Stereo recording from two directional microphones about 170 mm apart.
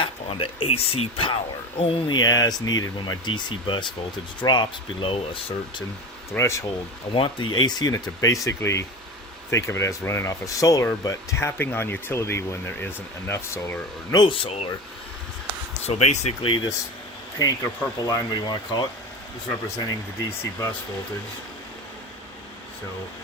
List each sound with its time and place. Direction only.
0.0 s speech: 30° left (ahead or behind)
6.3 s speech: 15° left (ahead or behind)
7.1 s speech: 30° left (ahead or behind)
15.8 s speech: 40° left (ahead or behind)
17.3 s speech: 20° left (ahead or behind)